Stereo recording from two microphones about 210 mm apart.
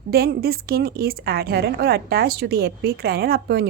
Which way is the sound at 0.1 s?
45° right (ahead or behind).